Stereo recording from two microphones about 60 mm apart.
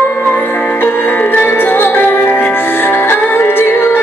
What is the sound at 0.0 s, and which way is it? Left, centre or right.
Music, left.